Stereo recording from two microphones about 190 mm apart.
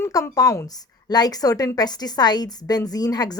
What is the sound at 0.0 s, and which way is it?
A woman's voice, 15° left (ahead or behind).